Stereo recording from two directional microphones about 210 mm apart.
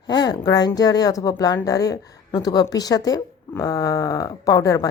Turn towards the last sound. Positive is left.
turn(degrees=15)  # may be behind; listen again after turning